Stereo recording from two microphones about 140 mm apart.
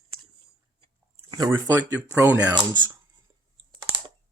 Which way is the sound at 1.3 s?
30° right (ahead or behind).